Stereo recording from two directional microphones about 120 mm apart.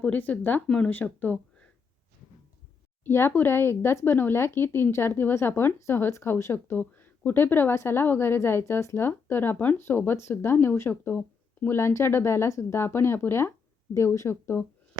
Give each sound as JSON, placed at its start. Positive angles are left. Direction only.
{"t": 0.0, "sound": "speech", "side_deg": 10}
{"t": 3.0, "sound": "a woman's voice", "side_deg": 20}